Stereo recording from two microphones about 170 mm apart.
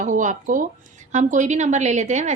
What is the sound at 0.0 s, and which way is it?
A woman's voice, 50° right (ahead or behind).